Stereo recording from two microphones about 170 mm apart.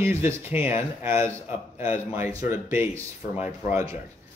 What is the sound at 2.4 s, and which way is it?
Speech, 15° right (ahead or behind).